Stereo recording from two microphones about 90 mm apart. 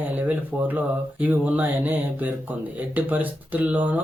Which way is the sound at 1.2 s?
20° right (ahead or behind).